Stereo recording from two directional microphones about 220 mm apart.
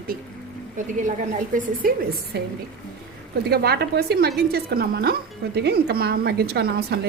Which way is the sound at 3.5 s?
45° right (ahead or behind).